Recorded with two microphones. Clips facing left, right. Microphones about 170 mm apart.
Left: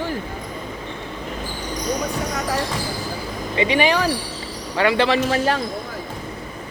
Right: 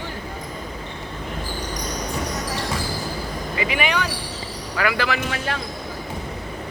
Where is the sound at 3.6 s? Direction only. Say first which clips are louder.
Left 6 dB; 30° left (ahead or behind).